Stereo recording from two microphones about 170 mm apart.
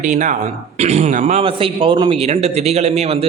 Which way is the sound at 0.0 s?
50° right (ahead or behind).